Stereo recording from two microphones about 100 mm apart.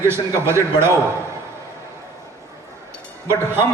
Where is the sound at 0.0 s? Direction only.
25° right (ahead or behind).